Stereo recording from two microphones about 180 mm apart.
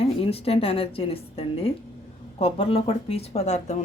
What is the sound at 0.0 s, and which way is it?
A woman's voice, 35° left (ahead or behind).